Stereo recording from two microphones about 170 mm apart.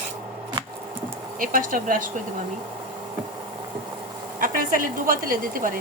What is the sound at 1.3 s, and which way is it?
Speech, 55° right (ahead or behind).